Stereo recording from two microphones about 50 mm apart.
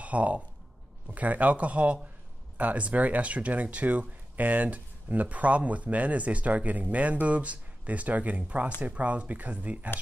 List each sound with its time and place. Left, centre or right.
0.0 s speech: right